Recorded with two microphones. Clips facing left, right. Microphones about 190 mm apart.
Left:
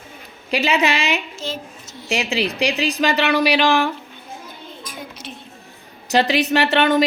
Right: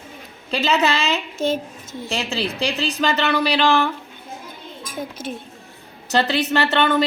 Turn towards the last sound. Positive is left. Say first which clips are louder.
# left 2 dB
turn(degrees=10)  # may be behind; listen again after turning